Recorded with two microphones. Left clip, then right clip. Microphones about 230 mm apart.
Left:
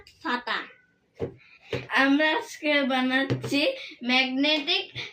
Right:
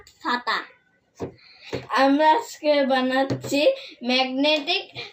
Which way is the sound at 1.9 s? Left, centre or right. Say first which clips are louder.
Right 5 dB; centre.